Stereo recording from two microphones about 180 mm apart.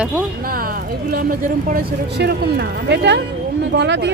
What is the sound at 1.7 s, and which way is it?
Speech, 65° right (ahead or behind).